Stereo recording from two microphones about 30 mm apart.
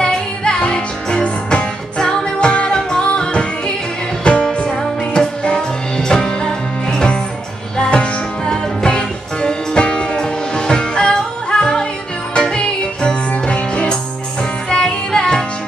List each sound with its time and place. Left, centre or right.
0.0 s music: left
5.9 s music: centre
8.5 s music: left